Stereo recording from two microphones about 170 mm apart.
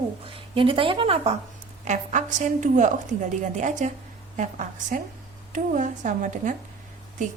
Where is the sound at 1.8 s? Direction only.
45° right (ahead or behind).